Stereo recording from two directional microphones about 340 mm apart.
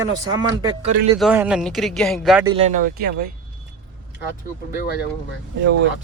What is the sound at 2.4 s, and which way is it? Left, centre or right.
Speech, centre.